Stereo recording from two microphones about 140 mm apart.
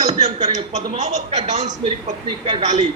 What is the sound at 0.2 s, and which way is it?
A man's voice, 55° right (ahead or behind).